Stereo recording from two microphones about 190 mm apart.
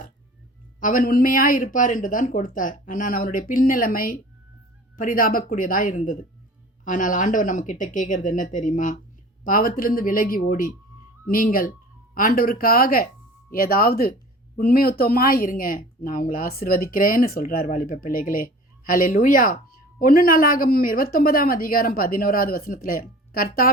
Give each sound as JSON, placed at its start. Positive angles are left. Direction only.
{"t": 0.8, "sound": "speech", "side_deg": 45}